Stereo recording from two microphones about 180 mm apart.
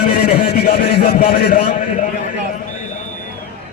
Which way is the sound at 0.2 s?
55° left (ahead or behind).